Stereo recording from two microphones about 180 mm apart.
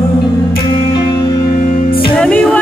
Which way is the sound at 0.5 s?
25° left (ahead or behind).